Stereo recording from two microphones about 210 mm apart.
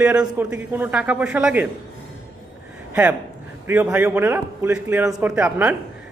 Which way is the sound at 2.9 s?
5° right (ahead or behind).